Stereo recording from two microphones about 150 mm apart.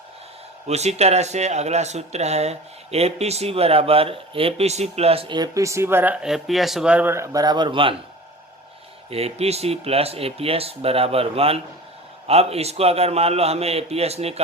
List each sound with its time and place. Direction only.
0.7 s speech: 45° right (ahead or behind)
5.4 s speech: 20° right (ahead or behind)
9.0 s speech: 40° right (ahead or behind)